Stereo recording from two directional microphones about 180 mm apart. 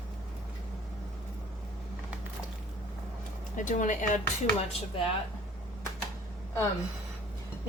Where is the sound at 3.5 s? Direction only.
45° left (ahead or behind).